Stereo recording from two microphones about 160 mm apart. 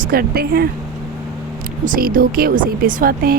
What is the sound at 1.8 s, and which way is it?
Speech, 60° right (ahead or behind).